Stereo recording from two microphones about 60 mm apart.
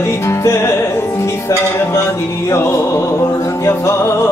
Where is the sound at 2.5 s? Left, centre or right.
Left.